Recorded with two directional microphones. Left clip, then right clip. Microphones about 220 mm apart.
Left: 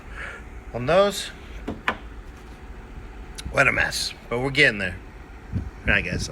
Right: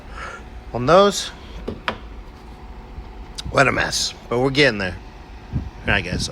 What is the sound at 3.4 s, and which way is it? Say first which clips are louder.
Speech: right 3 dB; 15° right (ahead or behind).